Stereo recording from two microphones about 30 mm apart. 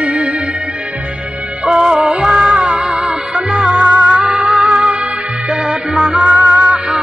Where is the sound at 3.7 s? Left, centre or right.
Right.